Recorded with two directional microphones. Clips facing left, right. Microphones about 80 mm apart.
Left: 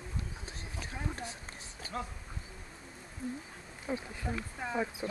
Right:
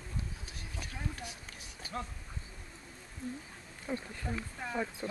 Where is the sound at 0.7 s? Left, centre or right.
Left.